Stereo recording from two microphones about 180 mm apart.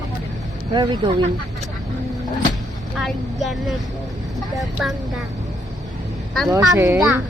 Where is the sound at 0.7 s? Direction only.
25° right (ahead or behind).